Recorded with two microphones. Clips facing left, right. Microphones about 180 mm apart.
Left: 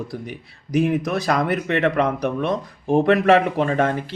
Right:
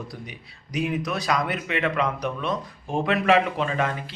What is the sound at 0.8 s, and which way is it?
A man's voice, 50° left (ahead or behind).